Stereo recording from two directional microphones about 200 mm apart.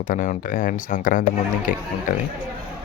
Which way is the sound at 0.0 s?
40° left (ahead or behind).